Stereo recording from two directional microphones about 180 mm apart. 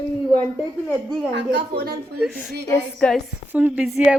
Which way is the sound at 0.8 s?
Centre (ahead or behind).